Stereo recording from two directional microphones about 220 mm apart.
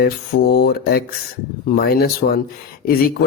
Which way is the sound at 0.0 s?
45° left (ahead or behind).